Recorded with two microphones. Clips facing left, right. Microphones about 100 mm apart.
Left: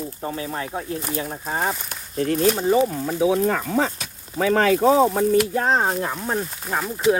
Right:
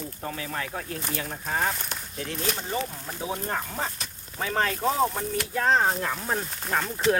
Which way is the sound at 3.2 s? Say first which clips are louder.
Left 10 dB; 90° left.